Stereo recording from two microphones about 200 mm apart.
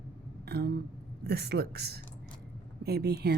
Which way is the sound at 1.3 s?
55° right (ahead or behind).